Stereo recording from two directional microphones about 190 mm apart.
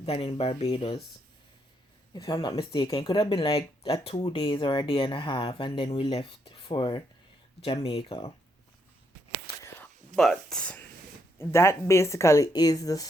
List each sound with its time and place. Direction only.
0.0 s speech: 30° left (ahead or behind)
2.1 s speech: 20° left (ahead or behind)
10.2 s speech: centre (ahead or behind); by 13.1 s 20° left (ahead or behind)